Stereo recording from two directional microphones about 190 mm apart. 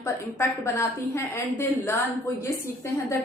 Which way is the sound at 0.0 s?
15° left (ahead or behind).